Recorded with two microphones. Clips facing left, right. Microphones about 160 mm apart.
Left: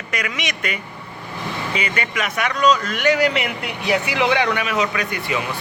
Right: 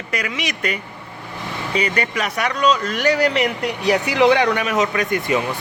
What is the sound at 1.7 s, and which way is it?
Speech, 35° right (ahead or behind).